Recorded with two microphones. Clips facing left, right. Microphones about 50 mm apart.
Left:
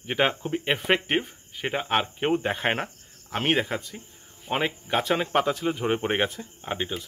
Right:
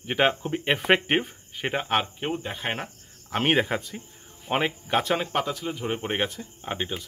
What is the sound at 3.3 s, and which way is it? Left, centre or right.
Speech, centre.